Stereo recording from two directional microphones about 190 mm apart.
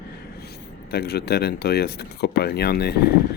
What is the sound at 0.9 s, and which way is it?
Speech, 55° left (ahead or behind).